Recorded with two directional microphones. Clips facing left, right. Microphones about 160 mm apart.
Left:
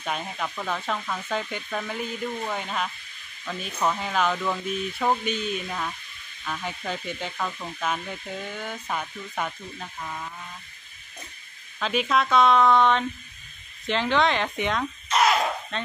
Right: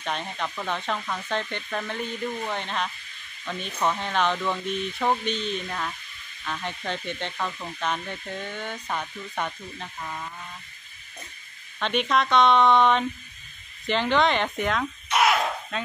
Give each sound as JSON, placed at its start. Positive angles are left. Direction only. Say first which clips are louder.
{"t": 0.0, "sound": "speech", "louder": "even", "side_deg": 5}
{"t": 11.8, "sound": "speech", "louder": "even", "side_deg": 5}